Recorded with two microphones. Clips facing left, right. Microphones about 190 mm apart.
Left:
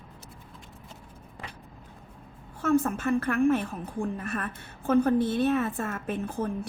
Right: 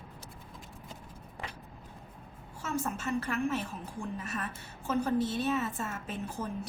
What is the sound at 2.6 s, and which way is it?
A woman's voice, 55° left (ahead or behind).